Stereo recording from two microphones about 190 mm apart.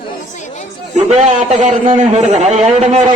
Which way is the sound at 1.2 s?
40° right (ahead or behind).